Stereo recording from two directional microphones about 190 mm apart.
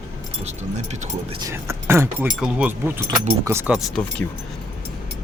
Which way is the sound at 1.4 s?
15° right (ahead or behind).